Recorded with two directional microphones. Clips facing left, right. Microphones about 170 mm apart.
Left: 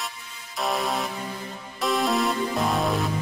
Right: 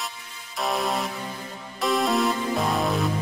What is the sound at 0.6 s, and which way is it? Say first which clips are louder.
Music: even; centre (ahead or behind).